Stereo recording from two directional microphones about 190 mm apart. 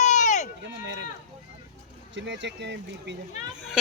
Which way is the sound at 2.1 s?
70° right (ahead or behind).